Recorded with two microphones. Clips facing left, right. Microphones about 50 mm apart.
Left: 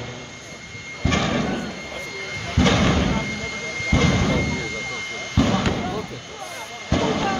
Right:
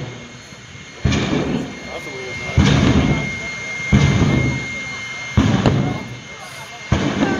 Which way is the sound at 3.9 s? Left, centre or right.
Right.